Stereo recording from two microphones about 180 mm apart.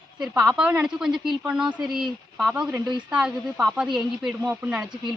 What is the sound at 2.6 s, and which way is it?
Speech, 20° right (ahead or behind).